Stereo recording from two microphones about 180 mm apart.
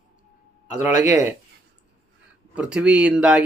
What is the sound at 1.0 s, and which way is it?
Speech, 15° right (ahead or behind).